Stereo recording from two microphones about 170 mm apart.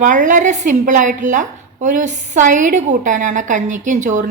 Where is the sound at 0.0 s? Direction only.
45° right (ahead or behind).